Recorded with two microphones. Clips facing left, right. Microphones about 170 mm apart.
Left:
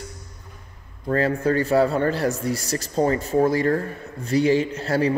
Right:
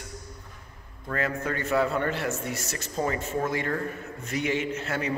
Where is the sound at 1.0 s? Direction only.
35° left (ahead or behind).